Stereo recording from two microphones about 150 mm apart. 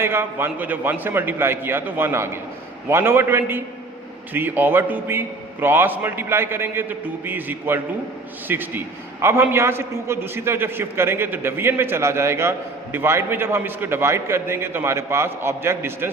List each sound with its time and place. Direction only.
0.0 s a man's voice: 15° right (ahead or behind)